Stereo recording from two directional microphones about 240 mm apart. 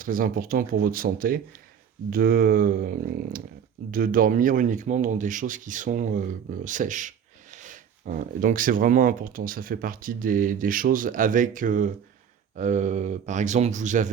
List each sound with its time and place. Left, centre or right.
0.0 s speech: right